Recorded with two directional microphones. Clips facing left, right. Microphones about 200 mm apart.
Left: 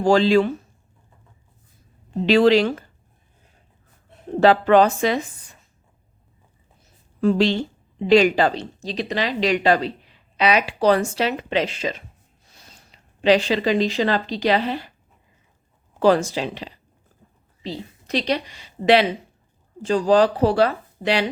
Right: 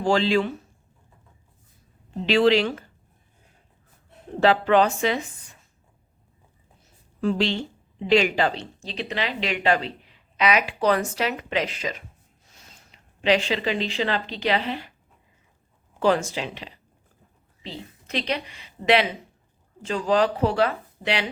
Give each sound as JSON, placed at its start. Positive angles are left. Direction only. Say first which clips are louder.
{"t": 0.0, "sound": "a woman's voice", "louder": "left 5 dB", "side_deg": 40}
{"t": 2.2, "sound": "a woman's voice", "louder": "left 4 dB", "side_deg": 40}
{"t": 4.4, "sound": "a woman's voice", "louder": "left 4 dB", "side_deg": 40}
{"t": 7.2, "sound": "a woman's voice", "louder": "left 5 dB", "side_deg": 40}
{"t": 16.0, "sound": "a woman's voice", "louder": "left 4 dB", "side_deg": 35}